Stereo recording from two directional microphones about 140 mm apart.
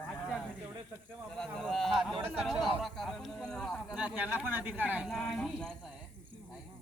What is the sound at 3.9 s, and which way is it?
Speech, 10° right (ahead or behind).